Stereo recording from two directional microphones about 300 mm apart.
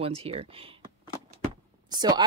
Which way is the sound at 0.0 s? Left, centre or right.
Centre.